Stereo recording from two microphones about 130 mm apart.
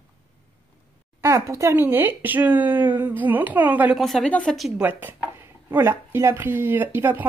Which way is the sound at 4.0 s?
Centre (ahead or behind).